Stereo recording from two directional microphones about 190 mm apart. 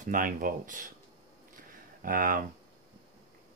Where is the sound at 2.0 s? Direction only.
45° right (ahead or behind).